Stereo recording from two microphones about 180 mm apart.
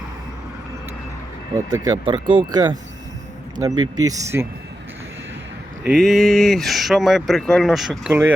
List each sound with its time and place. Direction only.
1.5 s speech: 20° right (ahead or behind)
5.8 s speech: centre (ahead or behind)